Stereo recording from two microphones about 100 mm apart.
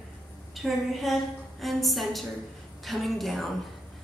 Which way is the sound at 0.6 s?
Centre (ahead or behind).